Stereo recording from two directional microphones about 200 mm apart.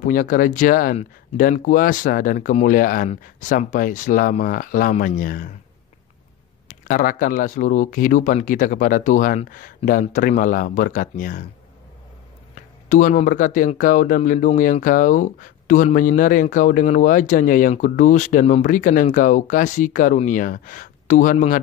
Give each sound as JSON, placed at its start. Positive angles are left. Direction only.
{"t": 0.0, "sound": "speech", "side_deg": 40}
{"t": 6.7, "sound": "speech", "side_deg": 40}
{"t": 12.5, "sound": "speech", "side_deg": 40}